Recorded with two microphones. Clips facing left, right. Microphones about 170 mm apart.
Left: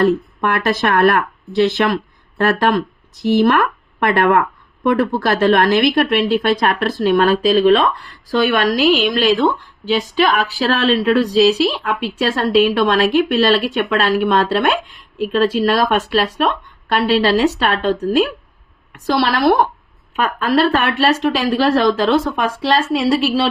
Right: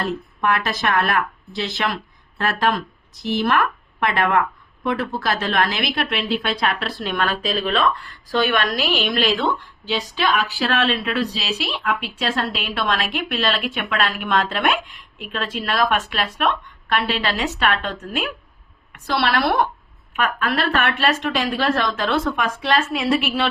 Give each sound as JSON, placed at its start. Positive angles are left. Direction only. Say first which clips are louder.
{"t": 0.0, "sound": "speech", "louder": "left 8 dB", "side_deg": 50}